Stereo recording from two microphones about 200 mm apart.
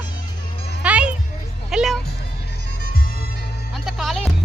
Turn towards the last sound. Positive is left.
turn(degrees=0)  # may be behind; listen again after turning